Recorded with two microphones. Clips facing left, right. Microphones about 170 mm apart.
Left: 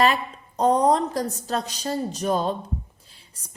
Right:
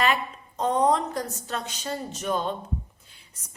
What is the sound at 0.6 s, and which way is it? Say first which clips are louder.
A woman's voice: left 4 dB; 35° left (ahead or behind).